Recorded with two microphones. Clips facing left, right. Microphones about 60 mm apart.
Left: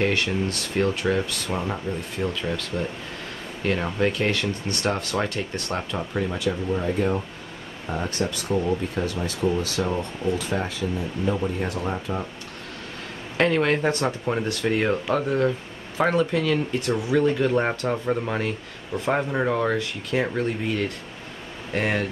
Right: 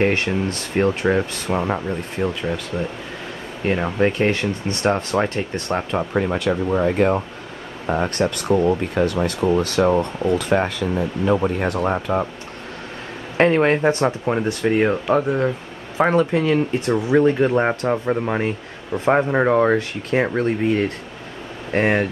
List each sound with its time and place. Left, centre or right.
0.0 s speech: right
3.6 s speech: right
6.9 s speech: right
7.8 s speech: right
13.4 s speech: right